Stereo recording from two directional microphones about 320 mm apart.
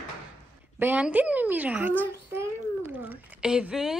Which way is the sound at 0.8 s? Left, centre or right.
Centre.